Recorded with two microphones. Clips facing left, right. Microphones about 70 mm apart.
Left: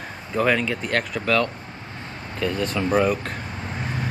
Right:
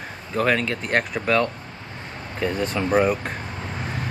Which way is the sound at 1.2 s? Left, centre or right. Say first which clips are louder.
Right 1 dB; right.